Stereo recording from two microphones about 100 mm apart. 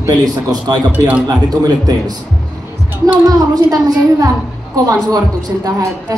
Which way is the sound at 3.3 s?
40° right (ahead or behind).